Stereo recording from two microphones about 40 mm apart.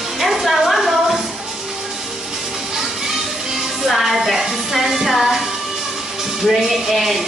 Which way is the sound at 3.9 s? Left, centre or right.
Centre.